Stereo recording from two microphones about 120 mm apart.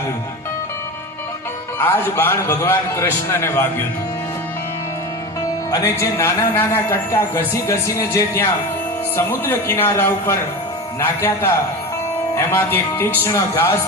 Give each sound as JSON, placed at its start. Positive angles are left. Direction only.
{"t": 1.8, "sound": "speech", "side_deg": 20}
{"t": 5.7, "sound": "speech", "side_deg": 25}